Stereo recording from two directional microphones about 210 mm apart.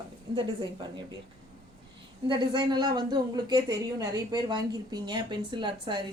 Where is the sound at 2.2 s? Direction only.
20° right (ahead or behind).